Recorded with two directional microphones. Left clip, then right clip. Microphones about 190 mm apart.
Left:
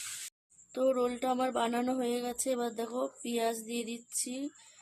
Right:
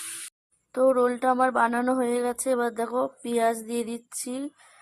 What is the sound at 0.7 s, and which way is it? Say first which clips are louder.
Speech: right 8 dB; 15° right (ahead or behind).